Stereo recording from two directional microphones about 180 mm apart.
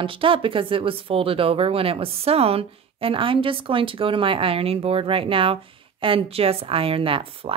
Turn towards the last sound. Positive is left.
turn(degrees=-30)  # may be behind; listen again after turning